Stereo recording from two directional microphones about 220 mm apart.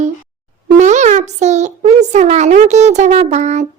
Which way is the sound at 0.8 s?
35° right (ahead or behind).